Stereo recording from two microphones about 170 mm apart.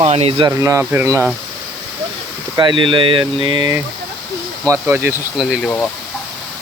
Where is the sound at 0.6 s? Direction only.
15° right (ahead or behind).